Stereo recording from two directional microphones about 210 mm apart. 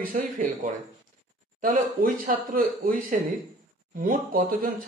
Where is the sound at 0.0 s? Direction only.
40° right (ahead or behind).